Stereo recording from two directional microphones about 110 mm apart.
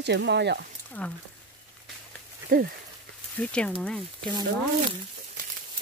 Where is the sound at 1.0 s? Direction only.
15° left (ahead or behind).